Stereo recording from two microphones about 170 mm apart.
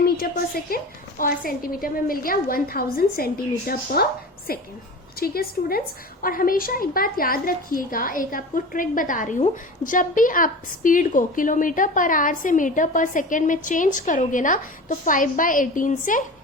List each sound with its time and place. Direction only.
1.2 s a woman's voice: 60° left (ahead or behind)